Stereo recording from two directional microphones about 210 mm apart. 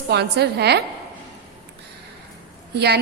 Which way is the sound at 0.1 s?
50° right (ahead or behind).